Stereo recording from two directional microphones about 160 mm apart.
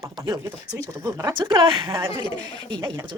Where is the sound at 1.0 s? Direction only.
25° right (ahead or behind).